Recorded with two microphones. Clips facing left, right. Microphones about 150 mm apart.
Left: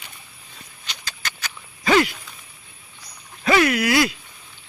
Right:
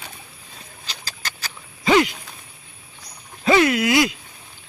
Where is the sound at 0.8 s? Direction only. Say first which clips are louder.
Left 1 dB; 35° right (ahead or behind).